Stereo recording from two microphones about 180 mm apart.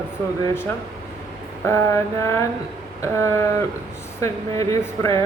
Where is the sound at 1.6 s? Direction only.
15° left (ahead or behind).